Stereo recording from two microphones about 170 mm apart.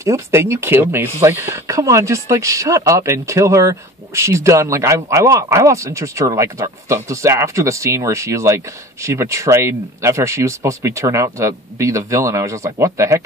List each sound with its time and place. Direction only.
0.0 s speech: 15° right (ahead or behind)